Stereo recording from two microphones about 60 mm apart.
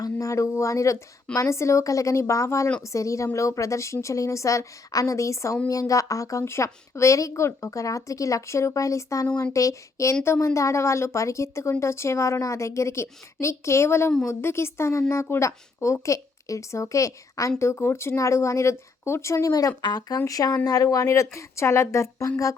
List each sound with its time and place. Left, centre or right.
0.0 s a woman's voice: left
5.6 s a woman's voice: left
10.2 s a woman's voice: left
17.6 s a woman's voice: left
20.9 s a woman's voice: left